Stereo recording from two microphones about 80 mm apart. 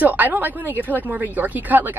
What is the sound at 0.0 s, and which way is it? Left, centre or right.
A woman's voice, right.